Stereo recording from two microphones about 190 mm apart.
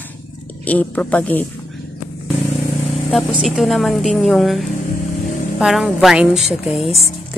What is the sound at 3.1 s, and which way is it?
Speech, centre (ahead or behind).